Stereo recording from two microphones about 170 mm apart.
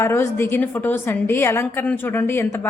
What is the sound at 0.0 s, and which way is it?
A woman's voice, 15° left (ahead or behind).